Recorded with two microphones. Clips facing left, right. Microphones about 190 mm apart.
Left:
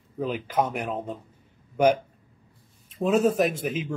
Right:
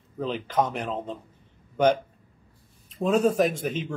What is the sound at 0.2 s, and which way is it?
Speech, 10° left (ahead or behind).